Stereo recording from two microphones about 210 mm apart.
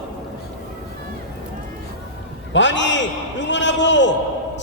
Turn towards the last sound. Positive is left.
turn(degrees=60)  # may be behind; listen again after turning